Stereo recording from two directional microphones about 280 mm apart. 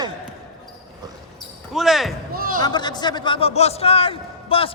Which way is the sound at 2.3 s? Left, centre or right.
Right.